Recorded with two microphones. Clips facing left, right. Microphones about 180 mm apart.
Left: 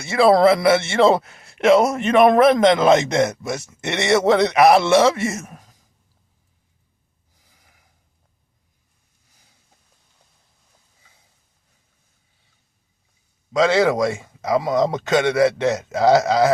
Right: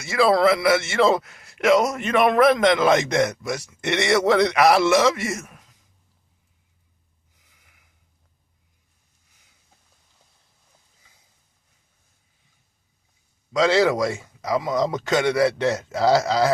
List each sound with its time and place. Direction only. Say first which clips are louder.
0.0 s a man's voice: left 4 dB; 30° left (ahead or behind)
7.3 s snort: left 4 dB; 35° left (ahead or behind)
13.5 s a man's voice: left 2 dB; 20° left (ahead or behind)